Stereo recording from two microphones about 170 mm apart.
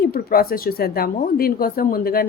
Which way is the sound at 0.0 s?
60° left (ahead or behind).